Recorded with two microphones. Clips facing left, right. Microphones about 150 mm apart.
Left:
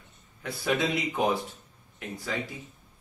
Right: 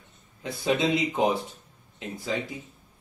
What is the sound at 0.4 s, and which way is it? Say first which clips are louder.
Speech: right 2 dB; 20° right (ahead or behind).